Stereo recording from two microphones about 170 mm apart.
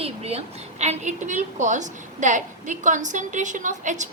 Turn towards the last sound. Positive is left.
turn(degrees=-45)  # may be behind; listen again after turning